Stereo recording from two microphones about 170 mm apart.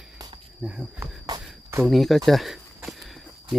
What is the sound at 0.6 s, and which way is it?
Speech, 5° right (ahead or behind).